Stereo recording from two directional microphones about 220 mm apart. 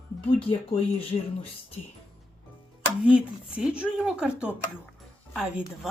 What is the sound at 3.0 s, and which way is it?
Speech, 5° right (ahead or behind).